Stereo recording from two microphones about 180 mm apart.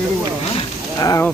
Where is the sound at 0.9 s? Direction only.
20° left (ahead or behind).